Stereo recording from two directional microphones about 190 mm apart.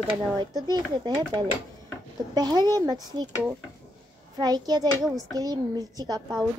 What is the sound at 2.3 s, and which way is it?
Speech, 20° right (ahead or behind).